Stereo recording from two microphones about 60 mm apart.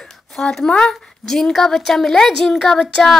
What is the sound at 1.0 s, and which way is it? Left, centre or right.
A woman's voice, centre.